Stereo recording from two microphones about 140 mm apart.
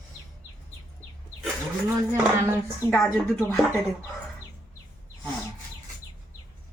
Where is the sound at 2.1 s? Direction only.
15° right (ahead or behind).